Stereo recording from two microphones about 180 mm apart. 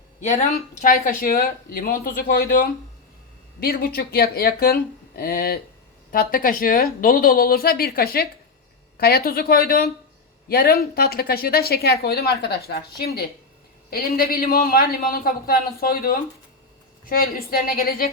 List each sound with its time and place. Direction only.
0.2 s speech: 40° left (ahead or behind)
3.6 s speech: 55° left (ahead or behind)